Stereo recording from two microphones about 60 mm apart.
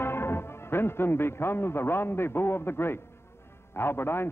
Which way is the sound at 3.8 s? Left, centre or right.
Left.